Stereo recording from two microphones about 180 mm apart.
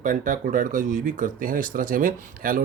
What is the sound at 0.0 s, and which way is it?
Speech, 45° right (ahead or behind).